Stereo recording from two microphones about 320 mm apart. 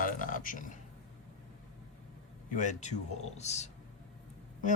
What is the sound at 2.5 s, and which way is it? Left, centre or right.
Speech, left.